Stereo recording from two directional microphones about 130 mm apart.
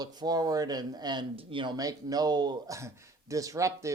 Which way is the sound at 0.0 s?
30° right (ahead or behind).